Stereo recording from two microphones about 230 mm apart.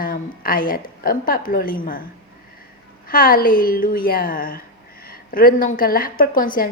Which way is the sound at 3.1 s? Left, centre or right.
Left.